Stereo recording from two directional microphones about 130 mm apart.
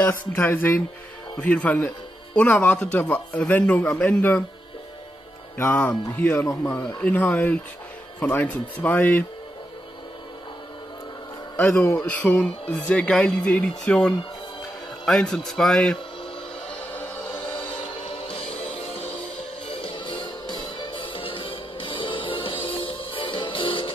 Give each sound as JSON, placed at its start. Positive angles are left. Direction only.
{"t": 0.3, "sound": "speech", "side_deg": 15}
{"t": 5.6, "sound": "speech", "side_deg": 15}
{"t": 11.5, "sound": "a man's voice", "side_deg": 15}
{"t": 18.0, "sound": "music", "side_deg": 45}